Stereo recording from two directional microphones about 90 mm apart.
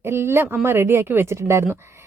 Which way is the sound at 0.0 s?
30° right (ahead or behind).